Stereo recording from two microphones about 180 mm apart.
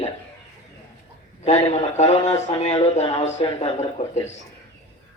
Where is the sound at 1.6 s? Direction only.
35° left (ahead or behind).